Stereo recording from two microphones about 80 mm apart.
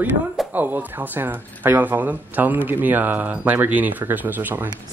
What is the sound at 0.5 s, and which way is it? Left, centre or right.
Speech, right.